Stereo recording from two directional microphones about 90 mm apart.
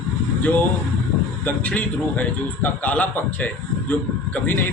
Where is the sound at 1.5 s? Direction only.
15° left (ahead or behind).